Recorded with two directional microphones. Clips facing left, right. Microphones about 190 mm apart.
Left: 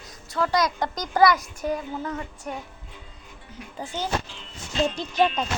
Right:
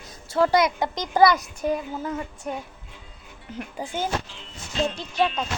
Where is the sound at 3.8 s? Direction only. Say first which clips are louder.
Right 2 dB; 15° right (ahead or behind).